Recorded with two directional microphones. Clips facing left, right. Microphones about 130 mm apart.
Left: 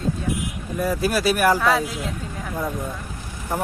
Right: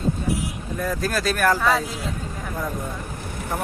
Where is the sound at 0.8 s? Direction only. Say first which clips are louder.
Left 3 dB; 10° left (ahead or behind).